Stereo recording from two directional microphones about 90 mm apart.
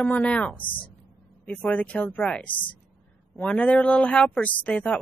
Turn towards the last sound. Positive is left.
turn(degrees=15)  # may be behind; listen again after turning